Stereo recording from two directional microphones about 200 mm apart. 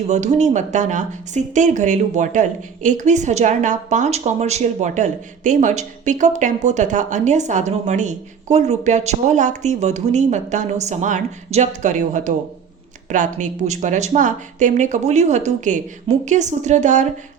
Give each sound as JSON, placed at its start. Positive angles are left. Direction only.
{"t": 0.1, "sound": "speech", "side_deg": -35}